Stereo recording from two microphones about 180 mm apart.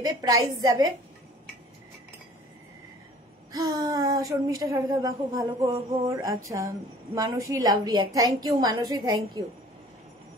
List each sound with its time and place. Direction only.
0.0 s a woman's voice: 20° right (ahead or behind)
3.5 s a woman's voice: 20° right (ahead or behind)